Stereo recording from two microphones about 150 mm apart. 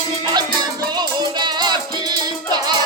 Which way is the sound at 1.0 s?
30° right (ahead or behind).